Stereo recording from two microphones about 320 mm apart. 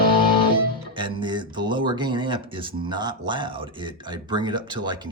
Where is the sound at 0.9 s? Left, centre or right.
Centre.